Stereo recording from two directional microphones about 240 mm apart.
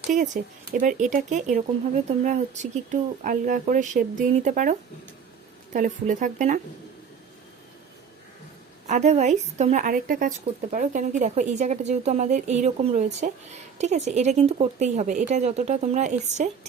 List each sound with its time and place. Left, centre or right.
0.7 s speech: right
8.9 s speech: right